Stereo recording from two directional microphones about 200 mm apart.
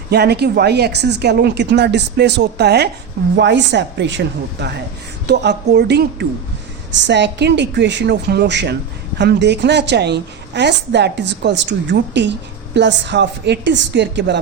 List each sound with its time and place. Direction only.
0.1 s a woman's voice: 55° right (ahead or behind)
5.2 s a woman's voice: 60° right (ahead or behind)